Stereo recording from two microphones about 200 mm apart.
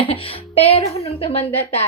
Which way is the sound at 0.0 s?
25° left (ahead or behind).